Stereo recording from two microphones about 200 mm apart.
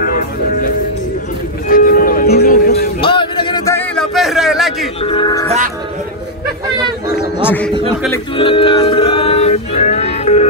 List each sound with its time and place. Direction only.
0.0 s music: 45° left (ahead or behind)
1.7 s music: 45° left (ahead or behind)
3.0 s a sound: 25° left (ahead or behind)
3.9 s a sound: centre (ahead or behind)
5.0 s music: 25° left (ahead or behind)
7.4 s music: 10° left (ahead or behind)
8.4 s music: 25° left (ahead or behind)